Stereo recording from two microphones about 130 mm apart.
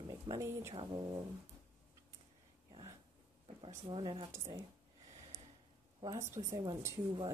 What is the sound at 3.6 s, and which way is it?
Speech, 40° right (ahead or behind).